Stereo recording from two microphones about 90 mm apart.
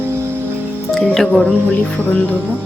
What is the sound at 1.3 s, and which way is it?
Speech, 15° left (ahead or behind).